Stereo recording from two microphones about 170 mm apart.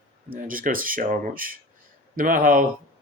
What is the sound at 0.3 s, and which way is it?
Speech, 55° right (ahead or behind).